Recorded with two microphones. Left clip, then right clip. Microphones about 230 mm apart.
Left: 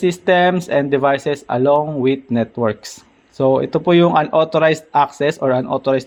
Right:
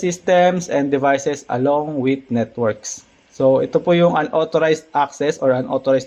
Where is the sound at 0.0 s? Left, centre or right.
Left.